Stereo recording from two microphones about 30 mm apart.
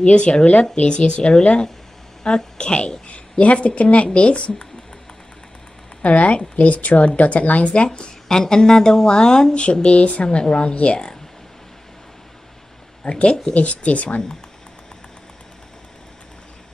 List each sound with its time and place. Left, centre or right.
0.0 s speech: left
3.1 s speech: left
6.0 s a woman's voice: left
7.7 s speech: left
8.3 s a woman's voice: left
9.6 s speech: left
13.0 s speech: left
13.5 s a woman's voice: left